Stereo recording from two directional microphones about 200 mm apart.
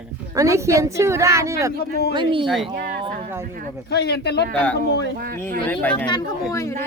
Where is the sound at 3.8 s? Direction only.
55° left (ahead or behind).